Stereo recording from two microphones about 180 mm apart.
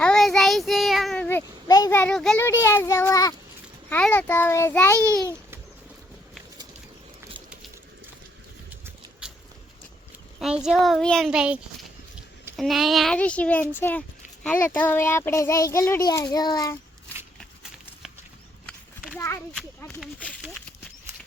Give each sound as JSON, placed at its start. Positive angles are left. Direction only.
{"t": 0.0, "sound": "child singing", "side_deg": 5}
{"t": 2.4, "sound": "a child's voice", "side_deg": 15}
{"t": 10.4, "sound": "a child's voice", "side_deg": -5}
{"t": 17.1, "sound": "shuffling cards", "side_deg": 10}
{"t": 18.6, "sound": "a sound", "side_deg": 5}